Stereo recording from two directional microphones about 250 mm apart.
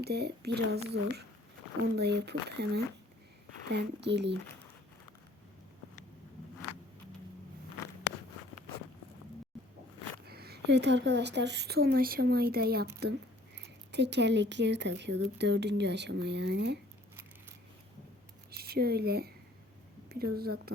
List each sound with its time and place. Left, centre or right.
0.0 s a woman's voice: right
10.2 s a woman's voice: right
13.9 s speech: right
18.5 s a woman's voice: right